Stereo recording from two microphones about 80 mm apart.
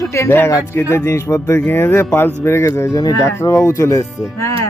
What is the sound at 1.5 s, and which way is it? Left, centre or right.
Speech, left.